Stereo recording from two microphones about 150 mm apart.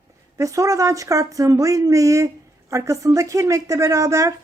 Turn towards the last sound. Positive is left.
turn(degrees=-20)  # may be behind; listen again after turning